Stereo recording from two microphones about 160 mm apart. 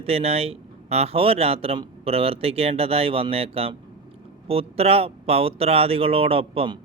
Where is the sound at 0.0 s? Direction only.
40° right (ahead or behind).